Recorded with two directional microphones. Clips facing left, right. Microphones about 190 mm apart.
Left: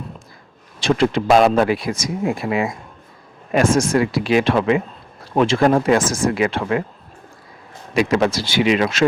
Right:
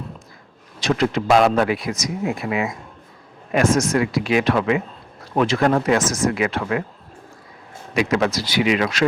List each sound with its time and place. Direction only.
0.8 s speech: 30° left (ahead or behind)
7.9 s speech: 30° left (ahead or behind)